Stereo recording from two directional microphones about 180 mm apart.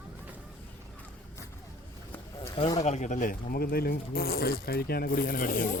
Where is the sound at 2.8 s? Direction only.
40° left (ahead or behind).